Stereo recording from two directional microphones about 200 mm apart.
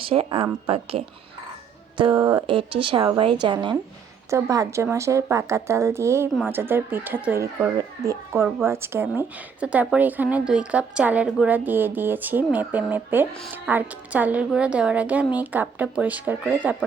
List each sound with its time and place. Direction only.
0.0 s a woman's voice: 30° right (ahead or behind); by 16.6 s 5° right (ahead or behind)